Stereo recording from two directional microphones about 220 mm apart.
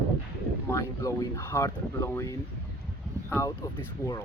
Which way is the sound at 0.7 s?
15° left (ahead or behind).